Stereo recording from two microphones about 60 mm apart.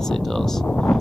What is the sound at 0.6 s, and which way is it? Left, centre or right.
Speech, centre.